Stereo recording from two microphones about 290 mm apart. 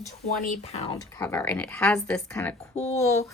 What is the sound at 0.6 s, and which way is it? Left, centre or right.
A woman's voice, left.